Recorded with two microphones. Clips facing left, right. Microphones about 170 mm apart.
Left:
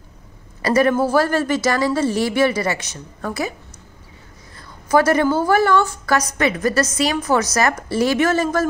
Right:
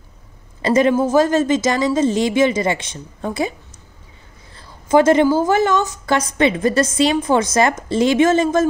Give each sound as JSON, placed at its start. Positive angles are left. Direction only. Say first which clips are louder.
{"t": 0.6, "sound": "a woman's voice", "louder": "right 1 dB", "side_deg": -25}
{"t": 4.6, "sound": "a sound", "louder": "right 3 dB", "side_deg": -25}
{"t": 5.5, "sound": "a woman's voice", "louder": "even", "side_deg": -20}